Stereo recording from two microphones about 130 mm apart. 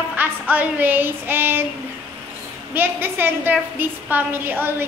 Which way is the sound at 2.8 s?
15° right (ahead or behind).